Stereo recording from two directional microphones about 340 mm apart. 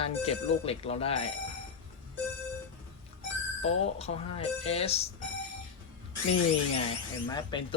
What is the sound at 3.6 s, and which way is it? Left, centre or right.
Speech, centre.